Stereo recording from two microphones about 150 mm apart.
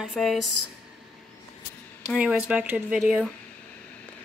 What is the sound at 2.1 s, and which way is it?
Speech, 10° right (ahead or behind).